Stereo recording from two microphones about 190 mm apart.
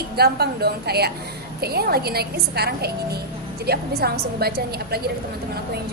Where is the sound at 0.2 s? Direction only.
55° right (ahead or behind).